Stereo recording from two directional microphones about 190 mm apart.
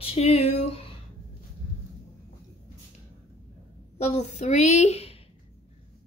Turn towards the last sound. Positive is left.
turn(degrees=35)  # may be behind; listen again after turning